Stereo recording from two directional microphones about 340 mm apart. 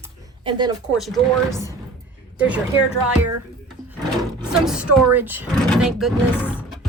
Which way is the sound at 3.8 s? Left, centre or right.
Centre.